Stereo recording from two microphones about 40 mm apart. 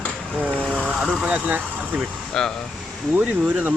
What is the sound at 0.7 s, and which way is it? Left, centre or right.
Speech, right.